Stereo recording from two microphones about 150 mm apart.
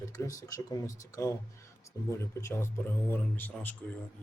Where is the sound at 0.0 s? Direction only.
20° left (ahead or behind).